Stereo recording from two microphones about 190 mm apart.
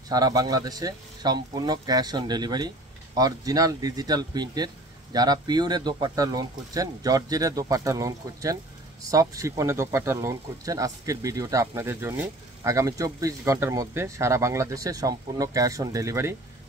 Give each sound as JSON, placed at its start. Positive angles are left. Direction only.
{"t": 0.1, "sound": "speech", "side_deg": -20}